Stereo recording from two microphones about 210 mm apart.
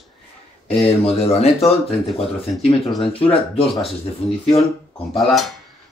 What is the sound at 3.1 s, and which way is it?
Speech, 10° left (ahead or behind).